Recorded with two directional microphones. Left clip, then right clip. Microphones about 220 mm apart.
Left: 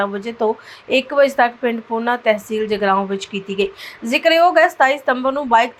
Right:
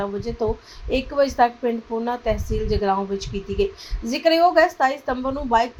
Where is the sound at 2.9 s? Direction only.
35° left (ahead or behind).